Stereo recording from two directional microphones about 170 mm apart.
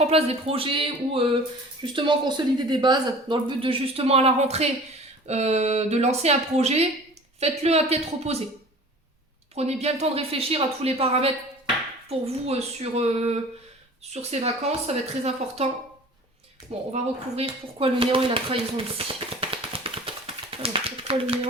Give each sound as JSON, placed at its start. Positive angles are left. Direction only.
{"t": 0.0, "sound": "speech", "side_deg": -35}
{"t": 9.6, "sound": "speech", "side_deg": -40}
{"t": 16.9, "sound": "speech", "side_deg": -35}